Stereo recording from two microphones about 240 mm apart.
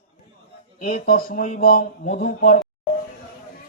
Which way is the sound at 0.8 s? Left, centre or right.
Left.